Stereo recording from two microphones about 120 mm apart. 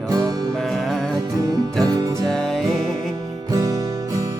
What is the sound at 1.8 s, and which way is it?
Music, 30° right (ahead or behind).